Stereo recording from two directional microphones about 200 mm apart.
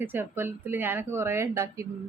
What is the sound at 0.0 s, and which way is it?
Speech, 10° right (ahead or behind).